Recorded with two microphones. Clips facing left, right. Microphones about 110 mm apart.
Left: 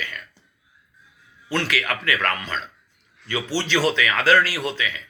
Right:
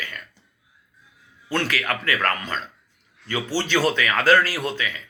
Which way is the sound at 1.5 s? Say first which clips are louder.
Even; 45° right (ahead or behind).